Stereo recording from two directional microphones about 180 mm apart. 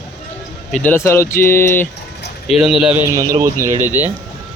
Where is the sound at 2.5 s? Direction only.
Centre (ahead or behind).